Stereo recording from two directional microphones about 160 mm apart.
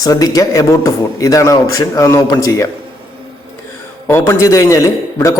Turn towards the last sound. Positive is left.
turn(degrees=20)  # may be behind; listen again after turning